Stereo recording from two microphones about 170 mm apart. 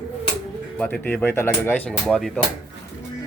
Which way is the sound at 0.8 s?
5° left (ahead or behind).